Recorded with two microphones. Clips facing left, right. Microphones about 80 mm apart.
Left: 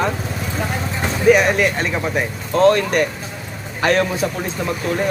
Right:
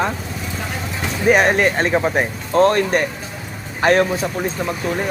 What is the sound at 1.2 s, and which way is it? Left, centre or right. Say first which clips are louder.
A man's voice: left 1 dB; right.